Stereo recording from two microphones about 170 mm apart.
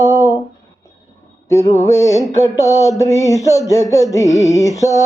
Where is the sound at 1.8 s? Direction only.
15° left (ahead or behind).